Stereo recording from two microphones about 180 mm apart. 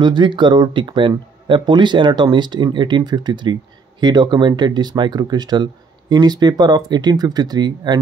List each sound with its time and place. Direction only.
0.0 s speech: 25° right (ahead or behind)